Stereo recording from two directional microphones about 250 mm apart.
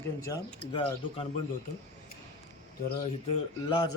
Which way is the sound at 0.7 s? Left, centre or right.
Centre.